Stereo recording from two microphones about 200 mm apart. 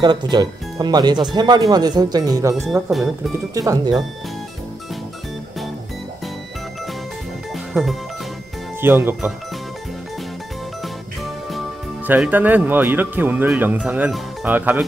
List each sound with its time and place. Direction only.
0.0 s speech: 20° right (ahead or behind)
2.6 s speech: centre (ahead or behind)
3.3 s speech: 15° right (ahead or behind)
7.7 s speech: centre (ahead or behind)
8.8 s speech: 10° right (ahead or behind)
12.1 s speech: 10° right (ahead or behind)